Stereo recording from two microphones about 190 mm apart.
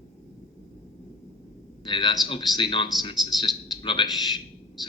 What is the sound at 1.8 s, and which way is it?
A man's voice, 25° left (ahead or behind).